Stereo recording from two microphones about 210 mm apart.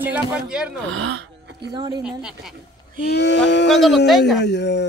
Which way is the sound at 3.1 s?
55° left (ahead or behind).